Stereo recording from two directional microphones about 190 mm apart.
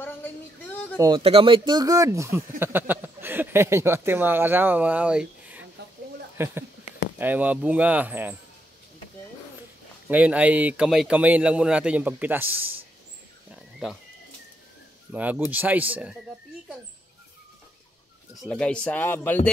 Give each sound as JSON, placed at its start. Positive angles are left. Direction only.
{"t": 0.0, "sound": "a sound", "side_deg": 10}
{"t": 0.9, "sound": "speech", "side_deg": -20}
{"t": 1.2, "sound": "a man's voice", "side_deg": -30}
{"t": 10.0, "sound": "a man's voice", "side_deg": -5}
{"t": 13.6, "sound": "cat", "side_deg": 0}
{"t": 15.1, "sound": "a man's voice", "side_deg": -5}
{"t": 18.4, "sound": "speech", "side_deg": 5}